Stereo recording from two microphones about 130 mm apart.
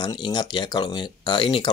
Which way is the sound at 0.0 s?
35° left (ahead or behind).